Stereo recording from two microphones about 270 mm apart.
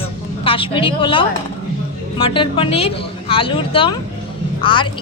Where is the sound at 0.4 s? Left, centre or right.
Centre.